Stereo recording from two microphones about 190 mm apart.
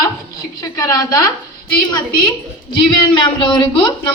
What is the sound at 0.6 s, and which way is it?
Speech, 15° left (ahead or behind).